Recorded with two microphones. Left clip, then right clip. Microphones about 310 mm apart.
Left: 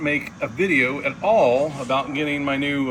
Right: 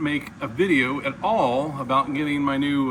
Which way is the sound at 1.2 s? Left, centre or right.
Right.